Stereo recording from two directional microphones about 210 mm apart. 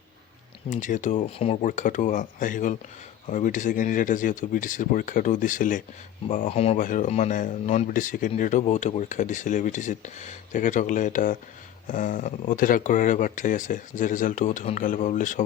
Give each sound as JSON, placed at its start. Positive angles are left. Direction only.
{"t": 0.7, "sound": "speech", "side_deg": 35}